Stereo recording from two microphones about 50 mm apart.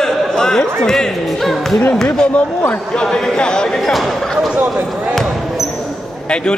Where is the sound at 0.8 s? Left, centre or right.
Centre.